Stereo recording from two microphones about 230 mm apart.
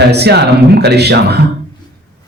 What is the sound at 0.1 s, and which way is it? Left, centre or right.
A man's voice, right.